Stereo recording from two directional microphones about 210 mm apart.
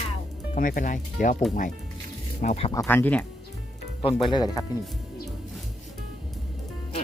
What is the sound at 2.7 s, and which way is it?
Speech, 10° left (ahead or behind).